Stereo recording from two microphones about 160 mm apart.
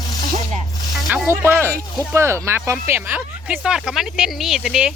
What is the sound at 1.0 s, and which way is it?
Speech, 10° right (ahead or behind).